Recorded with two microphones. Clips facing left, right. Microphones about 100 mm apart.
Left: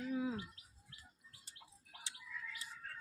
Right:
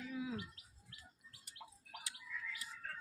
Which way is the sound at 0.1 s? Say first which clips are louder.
Left 4 dB; 35° left (ahead or behind).